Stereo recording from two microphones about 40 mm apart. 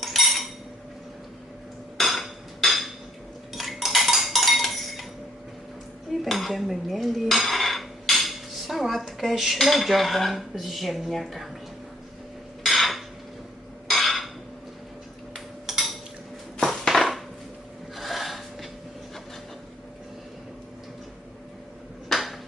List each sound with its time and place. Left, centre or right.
0.0 s a sound: centre
2.0 s hammer: centre
3.5 s dishes: centre
6.2 s cutlery: centre
12.6 s cutlery: centre
13.8 s a sound: centre
15.6 s cutlery: centre
16.8 s dishes: centre
17.9 s snort: centre
22.1 s dishes: centre